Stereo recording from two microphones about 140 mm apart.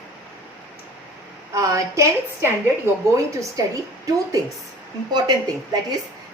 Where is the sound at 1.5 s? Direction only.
25° right (ahead or behind).